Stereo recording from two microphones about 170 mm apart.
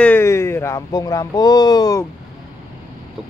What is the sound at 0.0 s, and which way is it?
Speech, 15° left (ahead or behind).